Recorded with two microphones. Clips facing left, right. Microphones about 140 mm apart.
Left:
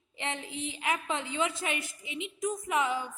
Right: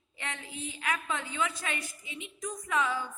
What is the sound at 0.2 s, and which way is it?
A woman's voice, 20° left (ahead or behind).